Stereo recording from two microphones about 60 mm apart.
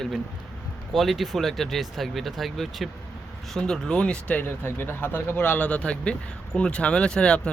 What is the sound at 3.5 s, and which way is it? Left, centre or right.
Speech, centre.